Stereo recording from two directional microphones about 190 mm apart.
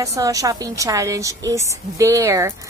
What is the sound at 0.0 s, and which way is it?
A woman's voice, 15° right (ahead or behind).